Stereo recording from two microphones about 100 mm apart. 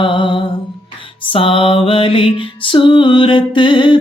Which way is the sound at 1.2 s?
65° left (ahead or behind).